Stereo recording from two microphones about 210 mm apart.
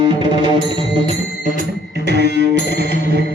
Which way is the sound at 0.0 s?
25° right (ahead or behind).